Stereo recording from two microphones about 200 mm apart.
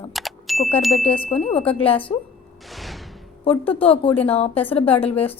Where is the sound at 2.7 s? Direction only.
Centre (ahead or behind).